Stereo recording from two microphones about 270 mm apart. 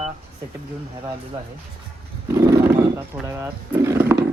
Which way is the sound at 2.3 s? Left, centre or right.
Centre.